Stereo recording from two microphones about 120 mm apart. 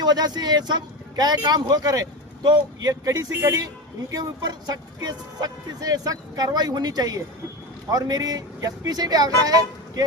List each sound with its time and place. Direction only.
0.0 s speech: 35° right (ahead or behind)